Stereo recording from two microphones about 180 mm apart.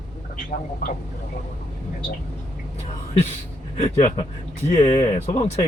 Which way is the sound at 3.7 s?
40° left (ahead or behind).